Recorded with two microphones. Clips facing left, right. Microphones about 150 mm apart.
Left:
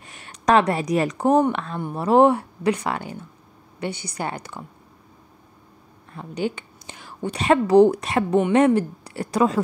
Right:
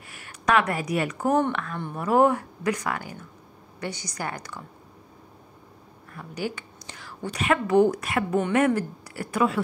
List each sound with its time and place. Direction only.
0.1 s speech: 30° left (ahead or behind)
1.3 s a woman's voice: 20° left (ahead or behind)
6.1 s a sound: 25° left (ahead or behind)
7.2 s a woman's voice: 30° left (ahead or behind)